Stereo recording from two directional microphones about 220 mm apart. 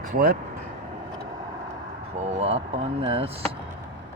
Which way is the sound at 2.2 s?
30° right (ahead or behind).